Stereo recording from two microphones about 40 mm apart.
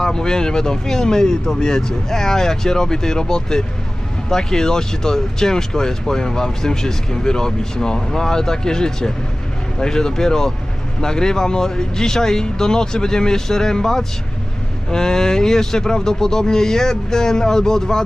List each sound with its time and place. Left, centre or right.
0.0 s speech: centre